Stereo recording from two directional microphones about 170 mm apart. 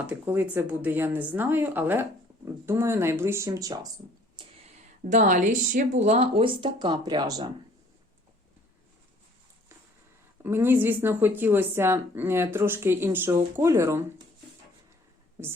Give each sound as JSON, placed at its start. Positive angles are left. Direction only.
{"t": 0.1, "sound": "a woman's voice", "side_deg": -10}
{"t": 4.4, "sound": "a sound", "side_deg": -30}
{"t": 5.0, "sound": "speech", "side_deg": -45}
{"t": 10.4, "sound": "a woman's voice", "side_deg": -10}